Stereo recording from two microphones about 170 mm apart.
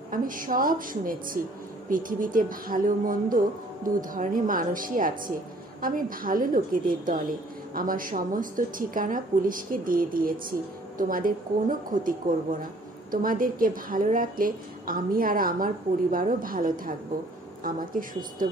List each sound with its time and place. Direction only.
0.1 s a woman's voice: 55° right (ahead or behind)